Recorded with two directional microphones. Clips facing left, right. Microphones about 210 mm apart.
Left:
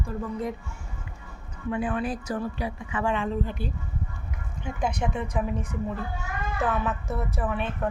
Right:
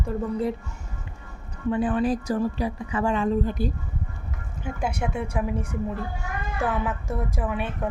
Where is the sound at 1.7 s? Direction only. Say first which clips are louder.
Right 5 dB; 35° right (ahead or behind).